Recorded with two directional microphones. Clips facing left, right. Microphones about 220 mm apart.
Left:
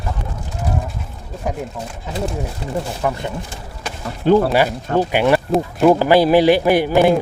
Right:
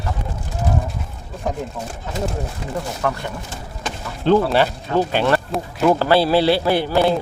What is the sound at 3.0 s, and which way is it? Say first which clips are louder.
Speech: left 1 dB; 15° left (ahead or behind).